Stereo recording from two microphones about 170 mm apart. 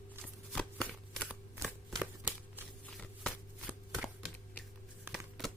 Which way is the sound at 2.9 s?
Centre (ahead or behind).